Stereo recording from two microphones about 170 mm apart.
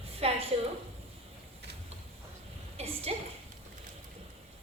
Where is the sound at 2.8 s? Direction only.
35° right (ahead or behind).